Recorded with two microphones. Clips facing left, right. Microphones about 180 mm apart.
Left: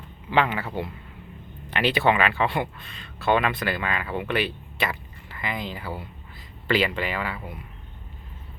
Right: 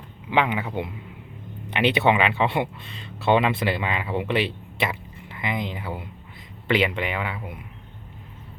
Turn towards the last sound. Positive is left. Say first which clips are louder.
# right 1 dB
turn(degrees=-20)  # may be behind; listen again after turning